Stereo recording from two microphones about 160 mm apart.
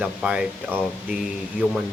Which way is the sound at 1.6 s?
10° right (ahead or behind).